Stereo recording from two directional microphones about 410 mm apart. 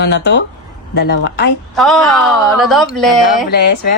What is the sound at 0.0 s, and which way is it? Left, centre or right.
Speech, left.